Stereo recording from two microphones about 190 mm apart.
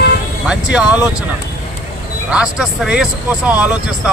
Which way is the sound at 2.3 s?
5° right (ahead or behind).